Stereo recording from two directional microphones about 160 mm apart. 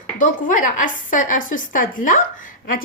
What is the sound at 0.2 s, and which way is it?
A woman's voice, 55° left (ahead or behind).